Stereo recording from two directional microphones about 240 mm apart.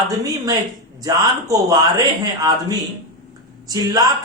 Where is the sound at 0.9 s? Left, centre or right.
Centre.